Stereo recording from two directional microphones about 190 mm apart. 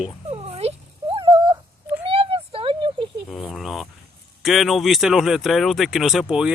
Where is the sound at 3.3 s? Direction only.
Centre (ahead or behind).